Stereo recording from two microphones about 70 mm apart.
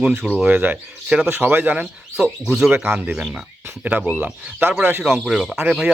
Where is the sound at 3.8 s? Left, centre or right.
Right.